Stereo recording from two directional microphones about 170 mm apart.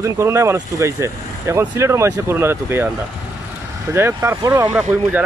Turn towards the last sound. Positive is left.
turn(degrees=-10)  # may be behind; listen again after turning